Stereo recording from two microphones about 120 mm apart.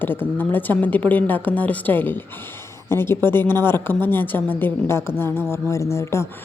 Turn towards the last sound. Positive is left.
turn(degrees=20)  # may be behind; listen again after turning